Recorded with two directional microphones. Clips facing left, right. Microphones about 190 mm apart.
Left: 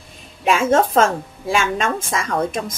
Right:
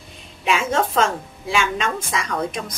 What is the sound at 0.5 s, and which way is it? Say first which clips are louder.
A woman's voice: left 5 dB; 45° left (ahead or behind).